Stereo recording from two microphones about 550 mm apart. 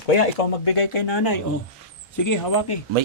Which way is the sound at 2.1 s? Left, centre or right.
Left.